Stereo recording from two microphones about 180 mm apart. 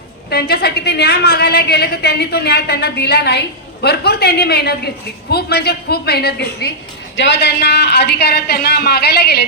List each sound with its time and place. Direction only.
0.3 s a woman's voice: 65° left (ahead or behind)
7.2 s a woman's voice: 80° left